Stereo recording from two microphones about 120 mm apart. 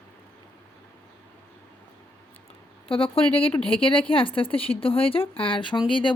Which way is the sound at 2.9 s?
50° left (ahead or behind).